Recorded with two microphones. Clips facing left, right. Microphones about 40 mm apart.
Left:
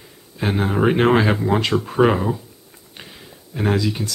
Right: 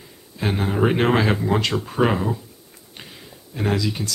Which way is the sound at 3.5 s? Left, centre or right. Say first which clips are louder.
Left 2 dB; centre.